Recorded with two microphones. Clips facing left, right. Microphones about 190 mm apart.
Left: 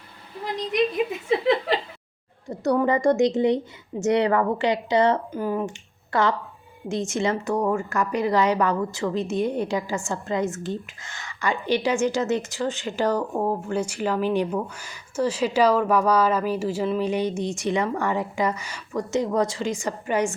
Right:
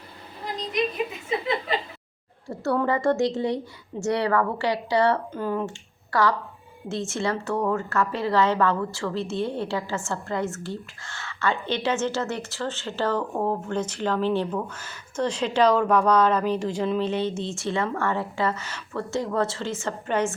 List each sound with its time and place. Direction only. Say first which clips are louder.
1.7 s chuckle: left 3 dB; 75° left (ahead or behind)
2.5 s speech: left 3 dB; 15° left (ahead or behind)